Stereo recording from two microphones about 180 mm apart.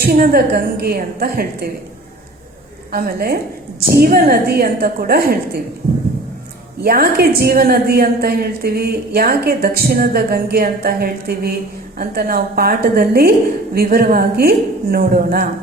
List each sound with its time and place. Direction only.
0.0 s a woman's voice: 55° right (ahead or behind)
2.9 s a woman's voice: 55° right (ahead or behind)
6.8 s a woman's voice: 55° right (ahead or behind)